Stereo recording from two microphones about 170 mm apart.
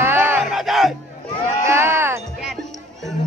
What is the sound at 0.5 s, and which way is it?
Battle cry, centre (ahead or behind).